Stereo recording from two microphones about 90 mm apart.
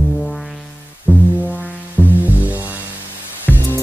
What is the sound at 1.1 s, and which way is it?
Music, 20° left (ahead or behind).